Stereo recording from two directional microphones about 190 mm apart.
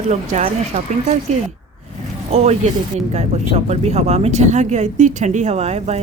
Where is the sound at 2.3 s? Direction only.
35° right (ahead or behind).